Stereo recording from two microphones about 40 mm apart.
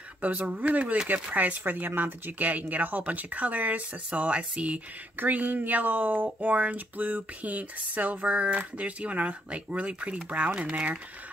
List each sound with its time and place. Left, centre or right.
0.2 s speech: right
1.6 s speech: right
5.1 s speech: right